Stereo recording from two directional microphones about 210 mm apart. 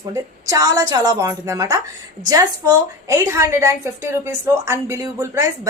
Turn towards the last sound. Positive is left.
turn(degrees=-15)  # may be behind; listen again after turning